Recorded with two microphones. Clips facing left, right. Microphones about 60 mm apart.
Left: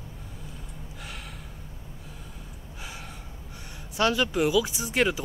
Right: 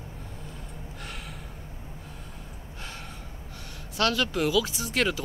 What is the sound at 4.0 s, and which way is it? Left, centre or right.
Speech, centre.